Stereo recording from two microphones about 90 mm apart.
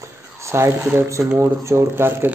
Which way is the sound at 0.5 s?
30° right (ahead or behind).